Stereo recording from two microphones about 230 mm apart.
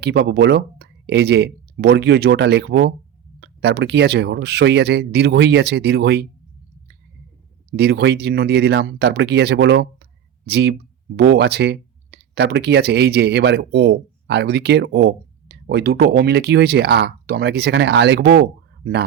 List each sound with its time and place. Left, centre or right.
0.0 s speech: right
7.7 s speech: right